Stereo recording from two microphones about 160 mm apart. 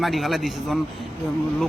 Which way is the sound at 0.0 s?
Centre (ahead or behind).